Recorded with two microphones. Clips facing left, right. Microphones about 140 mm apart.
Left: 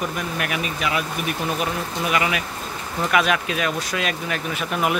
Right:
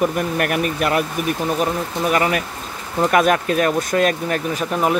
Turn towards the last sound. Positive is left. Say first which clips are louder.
# right 4 dB
turn(degrees=-30)  # may be behind; listen again after turning